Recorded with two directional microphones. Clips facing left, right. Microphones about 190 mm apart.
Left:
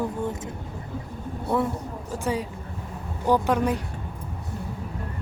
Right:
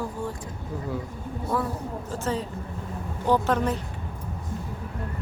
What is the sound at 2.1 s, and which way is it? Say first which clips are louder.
Speech: left 2 dB; 10° left (ahead or behind).